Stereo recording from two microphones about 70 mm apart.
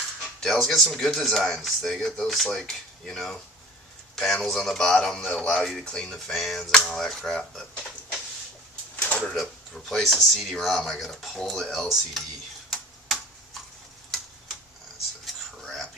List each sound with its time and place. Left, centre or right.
0.4 s speech: centre
9.3 s speech: centre
12.7 s tick-tock: centre
15.3 s a sound: centre